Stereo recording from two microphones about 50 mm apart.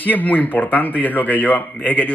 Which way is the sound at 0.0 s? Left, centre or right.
Left.